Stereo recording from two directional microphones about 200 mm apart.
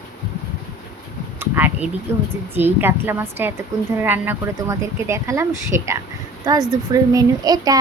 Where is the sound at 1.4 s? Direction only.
10° right (ahead or behind).